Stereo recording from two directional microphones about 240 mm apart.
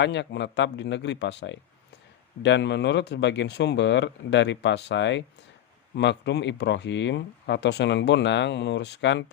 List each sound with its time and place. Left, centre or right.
0.0 s speech: left